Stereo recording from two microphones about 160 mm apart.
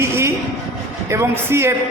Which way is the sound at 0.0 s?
15° right (ahead or behind).